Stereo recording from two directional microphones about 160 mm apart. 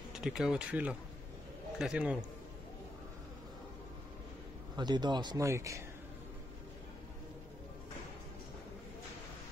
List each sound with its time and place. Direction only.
0.1 s a man's voice: 5° right (ahead or behind)
4.7 s speech: 25° right (ahead or behind)